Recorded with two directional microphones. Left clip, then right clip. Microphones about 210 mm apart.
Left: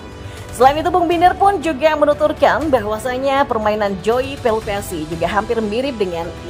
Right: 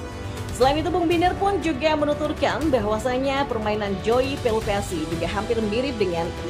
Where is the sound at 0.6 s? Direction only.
30° left (ahead or behind).